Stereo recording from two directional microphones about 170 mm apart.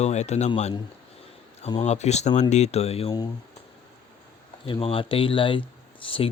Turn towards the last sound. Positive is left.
turn(degrees=30)  # may be behind; listen again after turning